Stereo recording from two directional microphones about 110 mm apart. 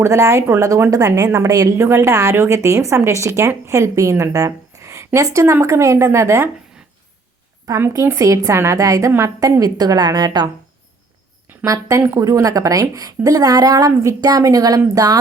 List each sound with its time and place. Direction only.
0.0 s a woman's voice: 30° right (ahead or behind)
7.7 s a woman's voice: 25° right (ahead or behind)
11.6 s a woman's voice: 30° right (ahead or behind)